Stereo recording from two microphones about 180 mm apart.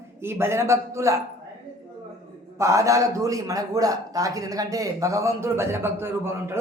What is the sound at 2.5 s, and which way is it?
A man's voice, 15° right (ahead or behind).